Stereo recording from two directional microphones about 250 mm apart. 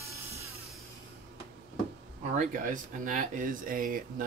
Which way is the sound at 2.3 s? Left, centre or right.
Right.